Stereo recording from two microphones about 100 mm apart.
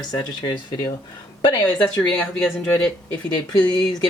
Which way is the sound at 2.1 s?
5° left (ahead or behind).